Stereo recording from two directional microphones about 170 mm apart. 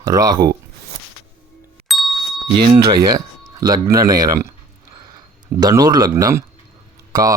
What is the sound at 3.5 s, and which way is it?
Speech, 20° right (ahead or behind).